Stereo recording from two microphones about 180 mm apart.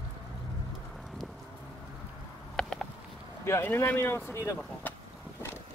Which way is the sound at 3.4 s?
15° left (ahead or behind).